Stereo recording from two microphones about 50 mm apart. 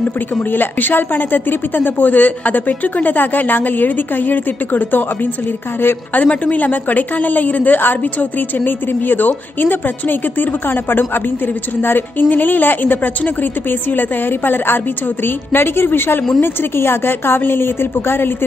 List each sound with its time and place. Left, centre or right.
0.4 s a woman's voice: left
6.1 s a woman's voice: left